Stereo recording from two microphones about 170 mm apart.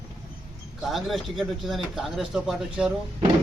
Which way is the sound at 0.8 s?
Centre (ahead or behind).